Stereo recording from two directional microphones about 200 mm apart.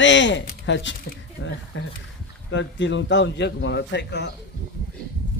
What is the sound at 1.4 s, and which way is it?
Speech, 90° left.